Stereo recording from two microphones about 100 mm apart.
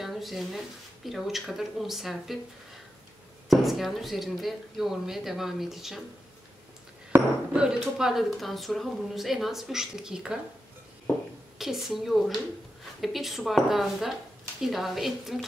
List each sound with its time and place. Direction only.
0.0 s a sound: centre (ahead or behind)
1.0 s a woman's voice: centre (ahead or behind)
3.4 s a woman's voice: centre (ahead or behind)
7.1 s a sound: 25° right (ahead or behind)
7.5 s a woman's voice: 10° right (ahead or behind)
11.5 s a woman's voice: 5° right (ahead or behind)